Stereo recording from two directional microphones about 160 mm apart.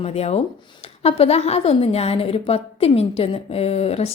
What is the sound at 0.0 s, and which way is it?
A woman's voice, 40° left (ahead or behind).